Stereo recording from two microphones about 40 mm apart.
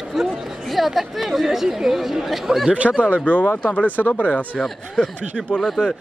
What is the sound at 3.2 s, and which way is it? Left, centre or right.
Speech, left.